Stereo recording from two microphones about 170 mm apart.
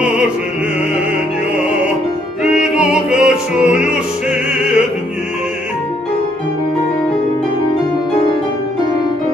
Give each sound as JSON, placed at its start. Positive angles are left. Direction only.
{"t": 0.0, "sound": "music", "side_deg": -5}
{"t": 2.4, "sound": "music", "side_deg": -5}